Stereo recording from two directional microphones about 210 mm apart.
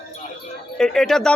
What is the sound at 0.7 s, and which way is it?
Speech, centre (ahead or behind).